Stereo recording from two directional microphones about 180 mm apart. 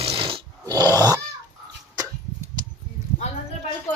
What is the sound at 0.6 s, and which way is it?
Grunt, 20° right (ahead or behind).